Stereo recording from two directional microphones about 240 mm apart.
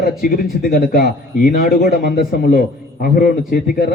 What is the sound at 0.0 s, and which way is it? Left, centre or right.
A man's voice, left.